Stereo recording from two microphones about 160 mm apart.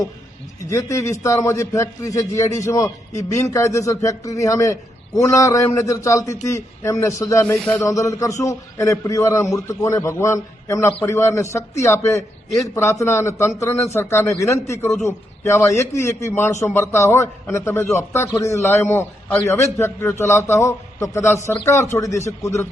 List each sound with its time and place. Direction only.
0.7 s a man's voice: 20° left (ahead or behind)
7.9 s a man's voice: 20° left (ahead or behind)